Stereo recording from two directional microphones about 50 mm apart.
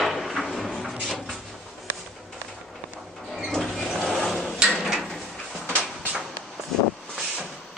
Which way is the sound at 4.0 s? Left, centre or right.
Centre.